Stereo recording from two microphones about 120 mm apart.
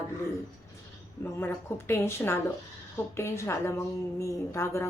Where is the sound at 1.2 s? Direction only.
20° left (ahead or behind).